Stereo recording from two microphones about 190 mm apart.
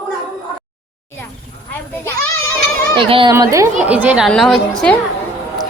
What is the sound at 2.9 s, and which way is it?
Speech, 25° right (ahead or behind).